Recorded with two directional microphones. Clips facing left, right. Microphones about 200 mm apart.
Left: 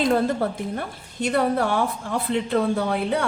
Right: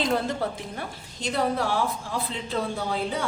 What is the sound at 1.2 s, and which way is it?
Speech, 60° left (ahead or behind).